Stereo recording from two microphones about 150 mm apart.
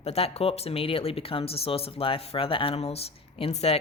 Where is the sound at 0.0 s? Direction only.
45° left (ahead or behind).